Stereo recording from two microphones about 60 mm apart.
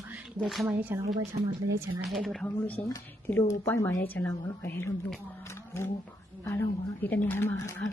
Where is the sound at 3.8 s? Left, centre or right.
Left.